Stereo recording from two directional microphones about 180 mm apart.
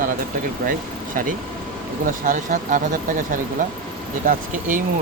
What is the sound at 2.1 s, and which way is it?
Speech, 50° right (ahead or behind).